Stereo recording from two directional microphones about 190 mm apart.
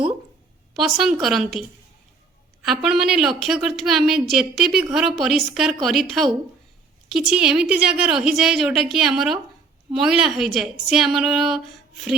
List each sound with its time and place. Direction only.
0.8 s a woman's voice: centre (ahead or behind)
2.6 s a woman's voice: centre (ahead or behind)